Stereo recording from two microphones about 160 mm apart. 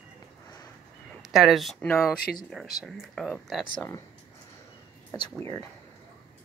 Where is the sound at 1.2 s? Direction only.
Centre (ahead or behind).